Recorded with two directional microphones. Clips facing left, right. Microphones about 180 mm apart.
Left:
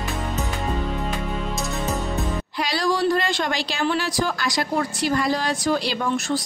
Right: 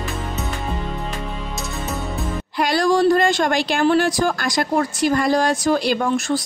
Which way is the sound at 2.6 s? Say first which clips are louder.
Right 6 dB; 50° right (ahead or behind).